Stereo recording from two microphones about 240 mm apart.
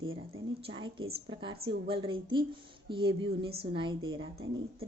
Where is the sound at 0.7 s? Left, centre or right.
Right.